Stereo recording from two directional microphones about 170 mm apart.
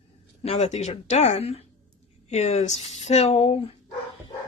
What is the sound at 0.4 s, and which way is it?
Speech, 40° left (ahead or behind).